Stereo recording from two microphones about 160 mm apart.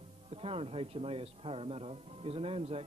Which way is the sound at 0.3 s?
40° right (ahead or behind).